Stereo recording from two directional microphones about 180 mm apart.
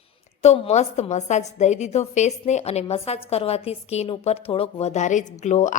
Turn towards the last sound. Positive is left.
turn(degrees=40)  # may be behind; listen again after turning